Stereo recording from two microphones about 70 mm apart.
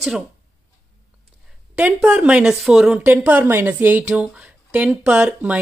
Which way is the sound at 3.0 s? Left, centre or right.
Right.